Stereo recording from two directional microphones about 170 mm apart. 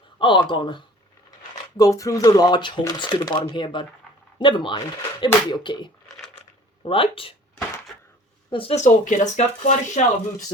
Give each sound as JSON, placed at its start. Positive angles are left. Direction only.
{"t": 0.2, "sound": "speech", "side_deg": 25}
{"t": 8.4, "sound": "speech", "side_deg": 30}